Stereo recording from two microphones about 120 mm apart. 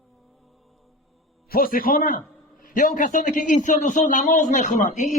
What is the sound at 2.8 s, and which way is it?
A man's voice, 90° left.